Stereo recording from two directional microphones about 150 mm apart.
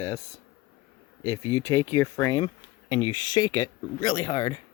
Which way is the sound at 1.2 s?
20° left (ahead or behind).